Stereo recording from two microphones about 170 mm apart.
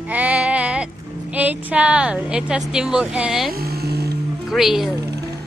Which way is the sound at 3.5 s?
65° right (ahead or behind).